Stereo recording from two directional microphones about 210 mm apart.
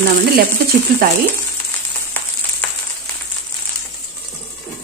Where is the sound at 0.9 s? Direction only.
45° right (ahead or behind).